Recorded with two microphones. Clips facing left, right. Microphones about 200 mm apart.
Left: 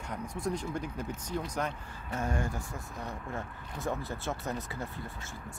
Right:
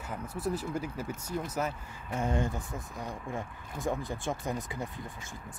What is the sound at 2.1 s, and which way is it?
Speech, 20° right (ahead or behind).